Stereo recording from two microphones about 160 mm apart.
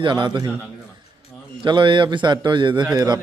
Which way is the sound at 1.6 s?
30° right (ahead or behind).